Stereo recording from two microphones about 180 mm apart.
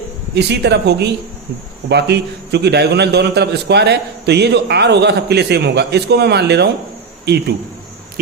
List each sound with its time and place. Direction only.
0.3 s a man's voice: 70° right (ahead or behind)